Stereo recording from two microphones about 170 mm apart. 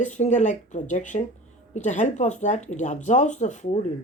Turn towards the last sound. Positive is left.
turn(degrees=45)  # may be behind; listen again after turning